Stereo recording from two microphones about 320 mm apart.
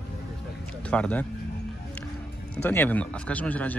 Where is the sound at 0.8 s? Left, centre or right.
Centre.